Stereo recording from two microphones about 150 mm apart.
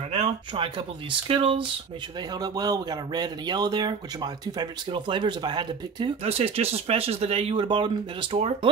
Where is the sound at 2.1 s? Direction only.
25° right (ahead or behind).